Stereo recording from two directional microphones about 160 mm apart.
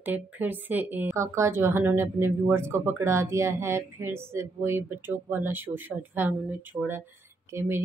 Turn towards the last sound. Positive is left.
turn(degrees=-15)  # may be behind; listen again after turning